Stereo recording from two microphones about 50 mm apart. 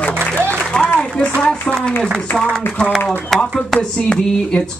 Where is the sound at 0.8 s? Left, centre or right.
Left.